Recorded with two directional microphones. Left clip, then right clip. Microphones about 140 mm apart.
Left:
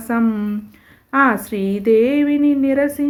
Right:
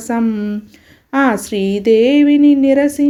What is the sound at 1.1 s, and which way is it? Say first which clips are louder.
Speech: right 1 dB; 30° right (ahead or behind).